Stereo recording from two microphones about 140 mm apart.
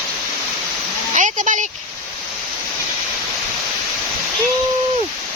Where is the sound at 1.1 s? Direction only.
65° right (ahead or behind).